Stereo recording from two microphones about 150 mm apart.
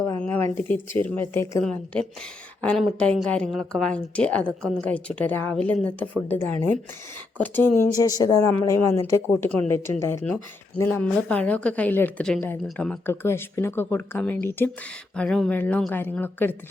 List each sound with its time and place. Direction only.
0.2 s a sound: 15° left (ahead or behind)
0.5 s speech: 15° left (ahead or behind)
7.9 s speech: 25° left (ahead or behind); by 13.1 s 5° left (ahead or behind)
13.2 s speech: 15° left (ahead or behind)